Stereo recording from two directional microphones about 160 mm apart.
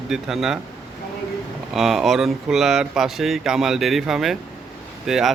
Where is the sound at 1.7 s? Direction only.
Centre (ahead or behind).